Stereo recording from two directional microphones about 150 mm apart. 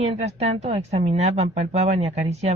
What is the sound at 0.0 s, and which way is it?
Speech, 45° right (ahead or behind).